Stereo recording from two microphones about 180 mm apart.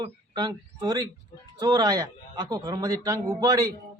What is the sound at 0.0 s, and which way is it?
Speech, 25° right (ahead or behind).